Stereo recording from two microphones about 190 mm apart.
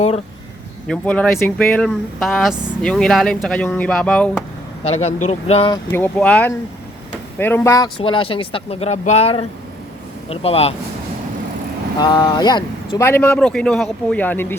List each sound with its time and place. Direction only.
0.9 s speech: 5° left (ahead or behind)
4.8 s speech: 35° left (ahead or behind)
5.9 s a man's voice: 10° left (ahead or behind)
7.9 s speech: 25° left (ahead or behind)
11.9 s speech: 20° left (ahead or behind)
13.1 s a man's voice: 10° left (ahead or behind)